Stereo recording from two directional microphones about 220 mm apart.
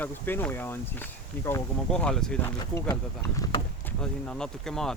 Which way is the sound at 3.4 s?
15° left (ahead or behind).